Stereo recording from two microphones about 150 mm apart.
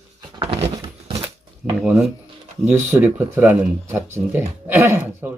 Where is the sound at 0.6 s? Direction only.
15° right (ahead or behind).